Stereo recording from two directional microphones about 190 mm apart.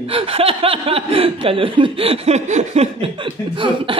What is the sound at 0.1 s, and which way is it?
Speech, 30° right (ahead or behind).